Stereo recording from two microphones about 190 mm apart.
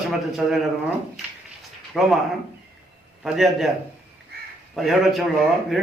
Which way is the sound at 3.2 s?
Centre (ahead or behind).